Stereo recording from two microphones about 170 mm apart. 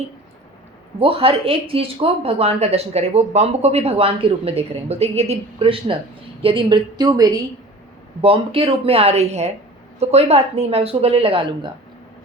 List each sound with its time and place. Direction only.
0.9 s a woman's voice: 35° right (ahead or behind)
8.2 s speech: 35° right (ahead or behind)